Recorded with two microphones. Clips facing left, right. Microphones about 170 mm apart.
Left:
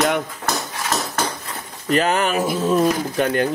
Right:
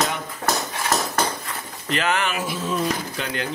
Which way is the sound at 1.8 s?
40° left (ahead or behind).